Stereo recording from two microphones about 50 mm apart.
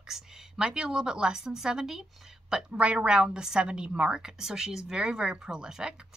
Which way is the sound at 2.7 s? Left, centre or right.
Right.